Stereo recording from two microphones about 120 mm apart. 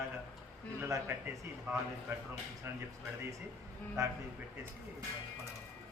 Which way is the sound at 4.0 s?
25° right (ahead or behind).